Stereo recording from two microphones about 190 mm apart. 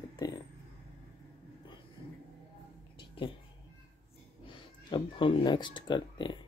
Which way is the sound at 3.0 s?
25° left (ahead or behind).